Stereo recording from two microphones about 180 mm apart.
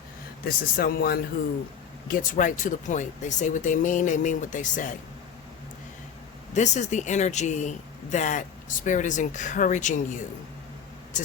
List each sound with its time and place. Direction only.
0.4 s speech: 55° left (ahead or behind)
6.5 s speech: 40° left (ahead or behind)